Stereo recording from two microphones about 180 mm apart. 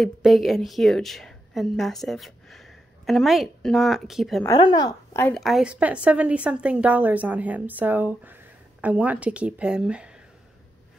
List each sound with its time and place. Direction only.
0.0 s a woman's voice: centre (ahead or behind)
4.6 s speech: 25° left (ahead or behind)
5.3 s speech: centre (ahead or behind)